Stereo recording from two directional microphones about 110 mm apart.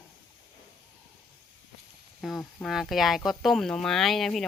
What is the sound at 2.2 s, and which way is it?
Speech, centre (ahead or behind).